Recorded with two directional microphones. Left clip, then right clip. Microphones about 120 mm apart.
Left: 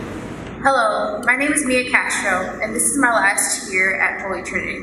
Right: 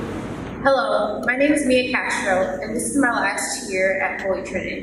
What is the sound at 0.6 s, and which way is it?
A man's voice, 35° left (ahead or behind).